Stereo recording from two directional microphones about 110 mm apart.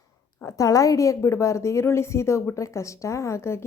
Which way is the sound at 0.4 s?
30° left (ahead or behind).